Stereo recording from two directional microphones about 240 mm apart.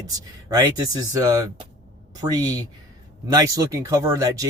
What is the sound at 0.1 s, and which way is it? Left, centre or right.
Speech, centre.